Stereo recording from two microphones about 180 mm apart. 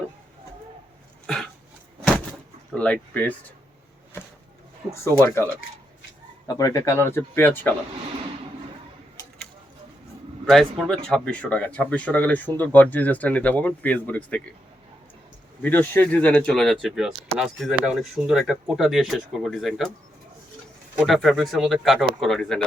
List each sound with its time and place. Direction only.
2.7 s speech: 5° left (ahead or behind)
5.2 s speech: 15° left (ahead or behind)
6.5 s speech: 20° left (ahead or behind)
10.4 s speech: 5° left (ahead or behind)
15.6 s speech: 10° left (ahead or behind)
20.9 s speech: 5° right (ahead or behind)